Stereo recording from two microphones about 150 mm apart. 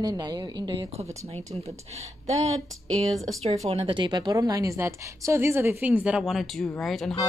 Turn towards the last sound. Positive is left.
turn(degrees=0)  # may be behind; listen again after turning